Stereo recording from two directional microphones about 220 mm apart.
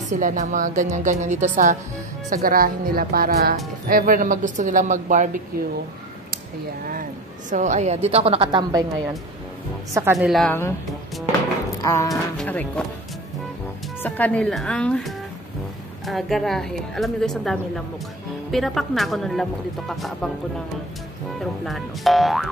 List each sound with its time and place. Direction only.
0.1 s speech: 35° right (ahead or behind)
6.9 s a woman's voice: 35° right (ahead or behind); by 8.8 s 20° right (ahead or behind)
10.1 s a woman's voice: centre (ahead or behind)
11.8 s speech: 15° left (ahead or behind)
12.1 s a woman's voice: 5° left (ahead or behind)
14.0 s a woman's voice: 5° left (ahead or behind)
21.4 s a woman's voice: centre (ahead or behind)